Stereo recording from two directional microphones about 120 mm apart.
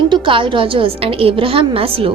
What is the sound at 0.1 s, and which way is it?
A woman's voice, 45° right (ahead or behind).